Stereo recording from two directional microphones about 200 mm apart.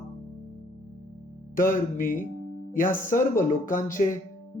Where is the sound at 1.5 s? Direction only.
45° left (ahead or behind).